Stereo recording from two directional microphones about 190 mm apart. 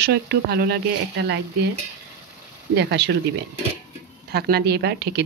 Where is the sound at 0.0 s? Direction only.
60° right (ahead or behind).